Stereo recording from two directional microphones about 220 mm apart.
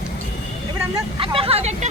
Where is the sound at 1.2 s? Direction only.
25° right (ahead or behind).